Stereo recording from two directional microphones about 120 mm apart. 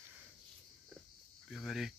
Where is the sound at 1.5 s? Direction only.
Centre (ahead or behind).